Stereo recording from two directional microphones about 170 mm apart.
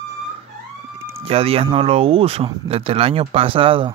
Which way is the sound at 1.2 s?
35° right (ahead or behind).